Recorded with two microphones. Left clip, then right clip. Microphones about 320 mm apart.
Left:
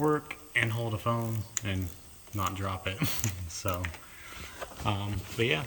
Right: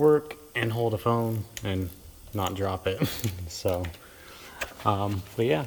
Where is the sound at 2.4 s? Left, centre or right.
Centre.